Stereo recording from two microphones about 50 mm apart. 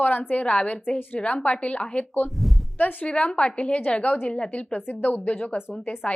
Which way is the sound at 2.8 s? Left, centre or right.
Left.